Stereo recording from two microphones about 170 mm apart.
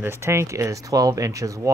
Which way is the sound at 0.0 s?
15° right (ahead or behind).